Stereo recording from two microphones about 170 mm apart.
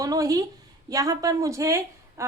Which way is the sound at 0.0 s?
20° right (ahead or behind).